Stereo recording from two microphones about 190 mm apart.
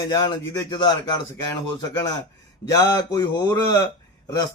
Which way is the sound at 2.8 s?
20° left (ahead or behind).